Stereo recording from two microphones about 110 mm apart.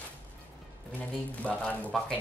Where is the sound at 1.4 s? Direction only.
10° left (ahead or behind).